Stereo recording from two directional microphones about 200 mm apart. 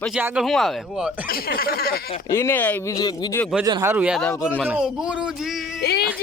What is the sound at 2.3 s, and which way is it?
Speech, 10° left (ahead or behind).